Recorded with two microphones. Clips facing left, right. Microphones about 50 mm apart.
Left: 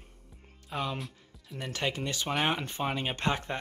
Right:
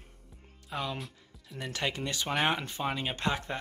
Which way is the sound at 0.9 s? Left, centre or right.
Centre.